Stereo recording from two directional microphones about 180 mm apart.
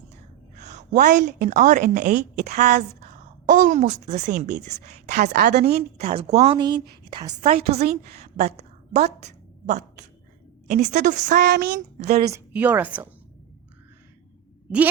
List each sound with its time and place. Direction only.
0.5 s a woman's voice: 40° right (ahead or behind)
6.0 s speech: 35° right (ahead or behind)
6.6 s a woman's voice: 25° right (ahead or behind)
7.4 s speech: 35° right (ahead or behind)
8.2 s a sound: 35° right (ahead or behind)
10.7 s a woman's voice: 40° right (ahead or behind)
11.3 s child singing: 65° right (ahead or behind)
11.9 s speech: 35° right (ahead or behind)
12.3 s a woman's voice: 10° right (ahead or behind)